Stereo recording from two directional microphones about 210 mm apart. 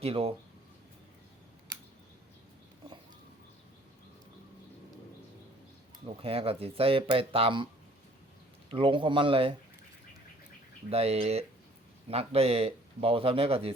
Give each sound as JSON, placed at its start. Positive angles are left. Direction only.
{"t": 0.0, "sound": "speech", "side_deg": -30}
{"t": 6.1, "sound": "speech", "side_deg": -25}
{"t": 8.7, "sound": "speech", "side_deg": -25}
{"t": 10.8, "sound": "speech", "side_deg": -30}